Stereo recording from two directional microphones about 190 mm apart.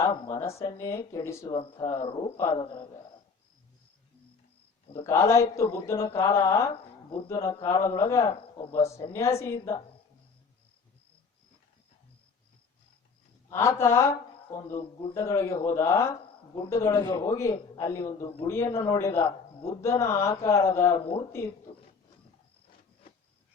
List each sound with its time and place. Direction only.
0.0 s speech: 15° left (ahead or behind)
1.5 s speech: 25° left (ahead or behind)
5.0 s speech: 15° left (ahead or behind)
13.5 s speech: 15° left (ahead or behind)
21.7 s speech: 30° left (ahead or behind)